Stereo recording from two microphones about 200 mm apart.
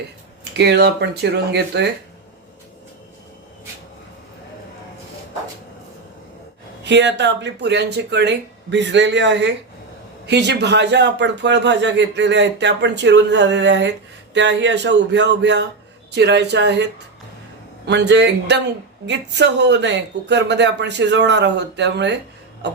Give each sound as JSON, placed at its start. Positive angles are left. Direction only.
{"t": 0.5, "sound": "speech", "side_deg": -55}
{"t": 6.8, "sound": "speech", "side_deg": -60}
{"t": 22.6, "sound": "a sound", "side_deg": -60}